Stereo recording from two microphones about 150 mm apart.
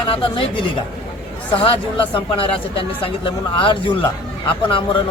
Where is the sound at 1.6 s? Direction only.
35° left (ahead or behind).